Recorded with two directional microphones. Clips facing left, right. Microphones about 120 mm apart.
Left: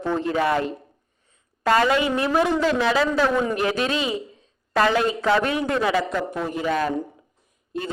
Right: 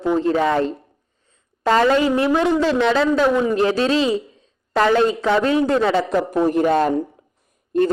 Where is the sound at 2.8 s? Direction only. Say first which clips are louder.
Right 4 dB; 5° left (ahead or behind).